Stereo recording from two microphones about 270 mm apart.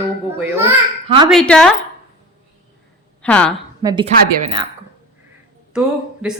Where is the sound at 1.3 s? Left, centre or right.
Centre.